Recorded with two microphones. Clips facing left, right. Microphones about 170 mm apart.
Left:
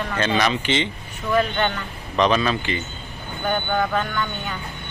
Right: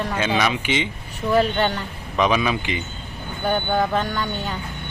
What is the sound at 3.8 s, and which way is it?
Speech, 35° right (ahead or behind).